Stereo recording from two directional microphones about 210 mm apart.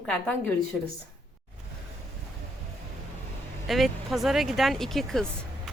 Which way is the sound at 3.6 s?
Centre (ahead or behind).